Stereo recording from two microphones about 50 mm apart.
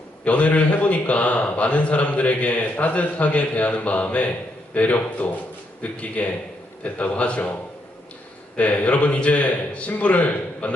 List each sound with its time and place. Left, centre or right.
0.3 s speech: left